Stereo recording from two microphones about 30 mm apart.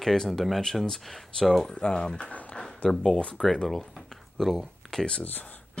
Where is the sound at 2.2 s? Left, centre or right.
Left.